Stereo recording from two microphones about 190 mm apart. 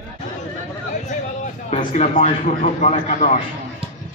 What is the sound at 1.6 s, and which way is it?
A man's voice, 35° left (ahead or behind).